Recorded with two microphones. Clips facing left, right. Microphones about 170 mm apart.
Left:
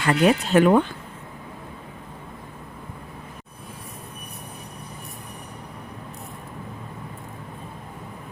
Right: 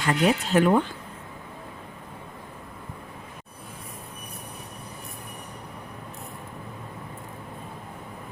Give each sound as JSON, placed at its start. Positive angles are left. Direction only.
{"t": 0.0, "sound": "speech", "side_deg": 70}